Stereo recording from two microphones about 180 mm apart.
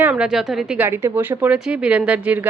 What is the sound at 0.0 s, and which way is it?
A woman's voice, 5° right (ahead or behind).